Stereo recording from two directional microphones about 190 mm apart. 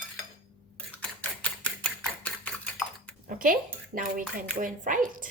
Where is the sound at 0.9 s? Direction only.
5° left (ahead or behind).